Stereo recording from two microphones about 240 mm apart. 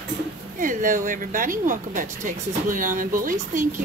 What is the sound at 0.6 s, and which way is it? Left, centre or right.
A woman's voice, right.